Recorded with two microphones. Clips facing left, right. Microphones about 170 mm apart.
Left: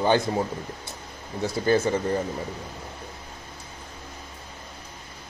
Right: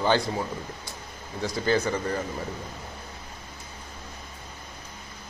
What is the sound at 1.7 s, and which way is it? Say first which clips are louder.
Speech: left 3 dB; 20° left (ahead or behind).